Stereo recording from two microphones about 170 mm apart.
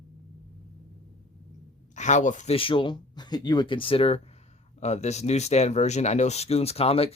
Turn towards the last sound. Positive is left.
turn(degrees=35)  # may be behind; listen again after turning